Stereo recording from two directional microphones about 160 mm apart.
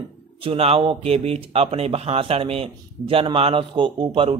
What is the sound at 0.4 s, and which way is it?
Speech, 35° right (ahead or behind).